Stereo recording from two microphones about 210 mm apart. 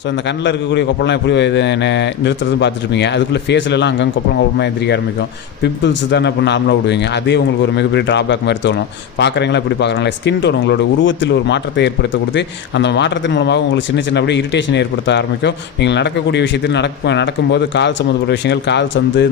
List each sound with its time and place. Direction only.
0.4 s speech: 55° left (ahead or behind)